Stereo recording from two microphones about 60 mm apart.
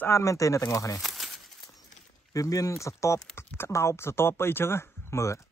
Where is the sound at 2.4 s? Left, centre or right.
Left.